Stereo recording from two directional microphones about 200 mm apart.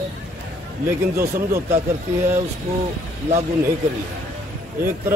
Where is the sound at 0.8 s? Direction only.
15° right (ahead or behind).